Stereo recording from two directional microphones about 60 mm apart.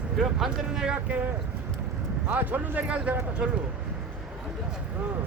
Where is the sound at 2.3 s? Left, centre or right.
Right.